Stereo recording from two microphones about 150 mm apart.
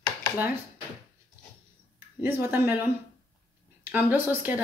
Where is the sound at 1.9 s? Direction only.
15° right (ahead or behind).